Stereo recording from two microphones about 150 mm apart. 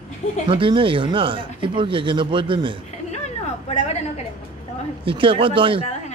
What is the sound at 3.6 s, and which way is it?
Speech, 45° left (ahead or behind).